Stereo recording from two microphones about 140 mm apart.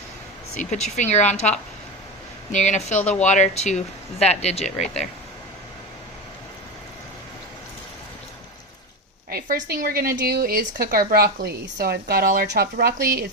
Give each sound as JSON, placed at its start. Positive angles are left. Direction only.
{"t": 0.6, "sound": "speech", "side_deg": 60}
{"t": 3.0, "sound": "speech", "side_deg": 10}
{"t": 3.2, "sound": "speech", "side_deg": 60}
{"t": 9.3, "sound": "speech", "side_deg": -90}